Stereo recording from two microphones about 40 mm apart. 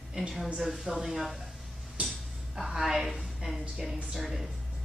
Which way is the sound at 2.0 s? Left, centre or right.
Right.